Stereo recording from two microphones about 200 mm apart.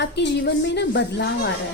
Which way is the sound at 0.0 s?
60° left (ahead or behind).